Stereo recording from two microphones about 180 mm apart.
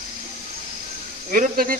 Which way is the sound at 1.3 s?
50° right (ahead or behind).